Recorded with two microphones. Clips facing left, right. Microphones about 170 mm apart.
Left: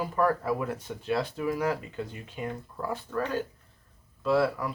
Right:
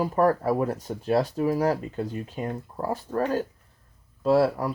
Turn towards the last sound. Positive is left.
turn(degrees=-40)  # may be behind; listen again after turning